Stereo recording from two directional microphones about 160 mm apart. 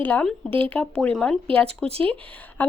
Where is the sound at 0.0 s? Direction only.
10° left (ahead or behind).